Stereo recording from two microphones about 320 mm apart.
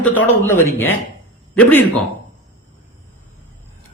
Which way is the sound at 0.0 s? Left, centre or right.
Centre.